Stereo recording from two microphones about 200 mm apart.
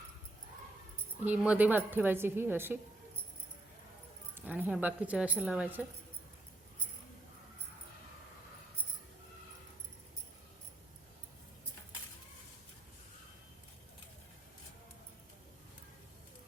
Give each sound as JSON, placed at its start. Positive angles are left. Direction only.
{"t": 1.2, "sound": "a woman's voice", "side_deg": -5}
{"t": 4.4, "sound": "a woman's voice", "side_deg": -10}